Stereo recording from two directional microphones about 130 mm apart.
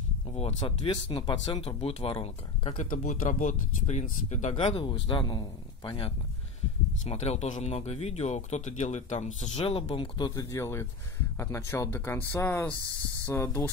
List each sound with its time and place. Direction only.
0.3 s speech: 55° left (ahead or behind)
0.8 s a man's voice: 35° left (ahead or behind)
1.6 s speech: 50° left (ahead or behind)
2.8 s speech: 80° left; by 4.6 s 65° left (ahead or behind)
4.6 s a man's voice: 45° left (ahead or behind)
7.1 s speech: 55° left (ahead or behind)
9.7 s a man's voice: 45° left (ahead or behind)
10.5 s speech: 20° left (ahead or behind)